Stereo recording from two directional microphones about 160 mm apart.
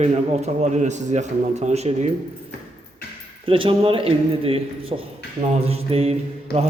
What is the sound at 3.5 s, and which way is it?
A man's voice, 35° right (ahead or behind).